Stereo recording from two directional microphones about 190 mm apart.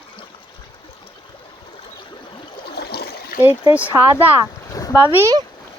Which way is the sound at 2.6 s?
60° left (ahead or behind).